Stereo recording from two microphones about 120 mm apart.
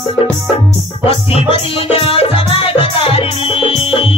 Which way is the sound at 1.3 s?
50° left (ahead or behind).